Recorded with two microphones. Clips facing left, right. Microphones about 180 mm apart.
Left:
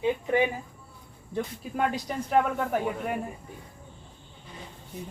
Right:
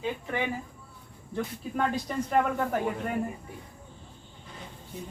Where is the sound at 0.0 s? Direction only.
20° left (ahead or behind).